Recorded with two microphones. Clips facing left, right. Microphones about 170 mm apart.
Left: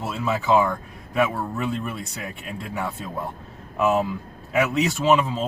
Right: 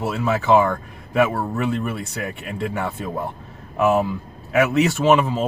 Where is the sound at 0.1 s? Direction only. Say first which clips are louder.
Right 3 dB; 65° right (ahead or behind).